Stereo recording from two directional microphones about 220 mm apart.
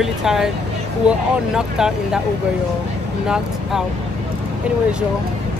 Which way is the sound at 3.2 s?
5° right (ahead or behind).